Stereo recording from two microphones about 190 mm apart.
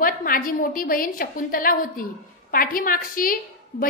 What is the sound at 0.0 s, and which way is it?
A woman's voice, 45° left (ahead or behind).